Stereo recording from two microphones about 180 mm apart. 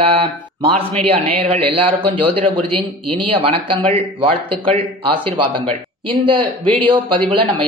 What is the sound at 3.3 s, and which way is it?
A woman's voice, 30° right (ahead or behind).